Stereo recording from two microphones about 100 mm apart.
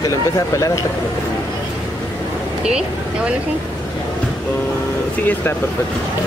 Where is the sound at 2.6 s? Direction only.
10° right (ahead or behind).